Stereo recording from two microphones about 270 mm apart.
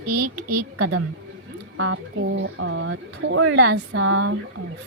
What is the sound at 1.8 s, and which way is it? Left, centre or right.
Speech, right.